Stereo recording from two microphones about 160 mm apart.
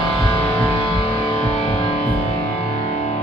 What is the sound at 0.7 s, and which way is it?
Music, 30° left (ahead or behind).